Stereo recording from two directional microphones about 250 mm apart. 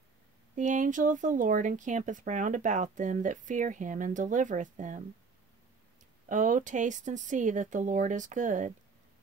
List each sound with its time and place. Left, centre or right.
0.6 s speech: right
6.2 s speech: right